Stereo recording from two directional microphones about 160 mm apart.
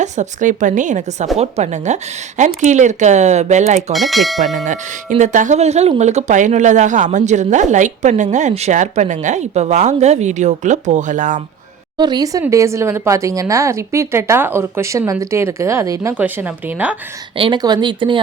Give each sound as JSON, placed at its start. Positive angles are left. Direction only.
{"t": 0.0, "sound": "speech", "side_deg": -50}
{"t": 3.9, "sound": "speech", "side_deg": 0}
{"t": 4.5, "sound": "speech", "side_deg": -50}
{"t": 11.9, "sound": "speech", "side_deg": -25}
{"t": 17.3, "sound": "speech", "side_deg": -30}